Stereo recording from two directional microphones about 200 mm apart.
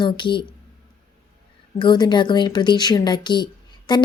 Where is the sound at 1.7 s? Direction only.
20° left (ahead or behind).